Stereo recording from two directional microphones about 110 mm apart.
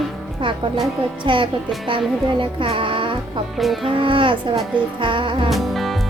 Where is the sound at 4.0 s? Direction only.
50° right (ahead or behind).